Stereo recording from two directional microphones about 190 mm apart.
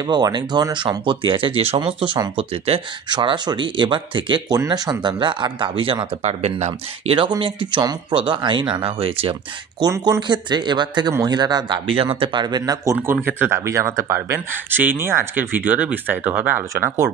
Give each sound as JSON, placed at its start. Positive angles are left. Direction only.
{"t": 0.0, "sound": "speech", "side_deg": -20}